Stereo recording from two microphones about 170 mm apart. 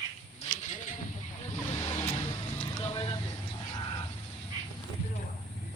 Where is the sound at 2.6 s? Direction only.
30° left (ahead or behind).